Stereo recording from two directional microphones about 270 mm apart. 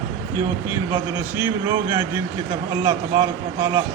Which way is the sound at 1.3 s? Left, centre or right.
Centre.